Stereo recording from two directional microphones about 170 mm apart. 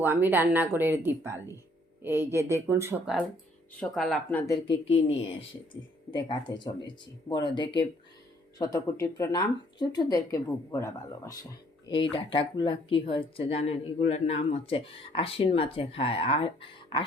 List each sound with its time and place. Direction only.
0.0 s speech: 10° right (ahead or behind)
3.8 s speech: centre (ahead or behind)
4.7 s speech: 35° left (ahead or behind)
6.1 s speech: 25° left (ahead or behind)
11.9 s speech: 30° left (ahead or behind)